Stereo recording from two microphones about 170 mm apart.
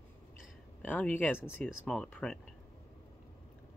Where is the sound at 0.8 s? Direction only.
10° left (ahead or behind).